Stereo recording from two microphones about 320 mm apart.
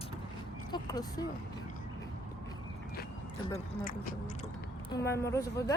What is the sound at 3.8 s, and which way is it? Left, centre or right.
Speech, left.